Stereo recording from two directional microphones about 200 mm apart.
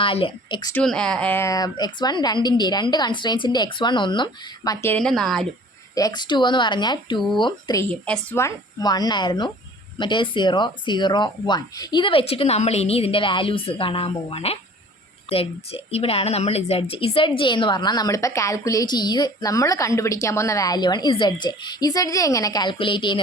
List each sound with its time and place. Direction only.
0.0 s a woman's voice: 25° left (ahead or behind)
0.7 s a woman's voice: 5° left (ahead or behind)
5.9 s a woman's voice: 20° left (ahead or behind)
8.0 s a woman's voice: 5° left (ahead or behind); by 23.2 s 25° left (ahead or behind)